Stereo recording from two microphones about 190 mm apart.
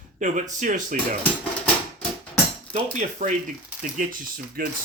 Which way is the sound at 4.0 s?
45° right (ahead or behind).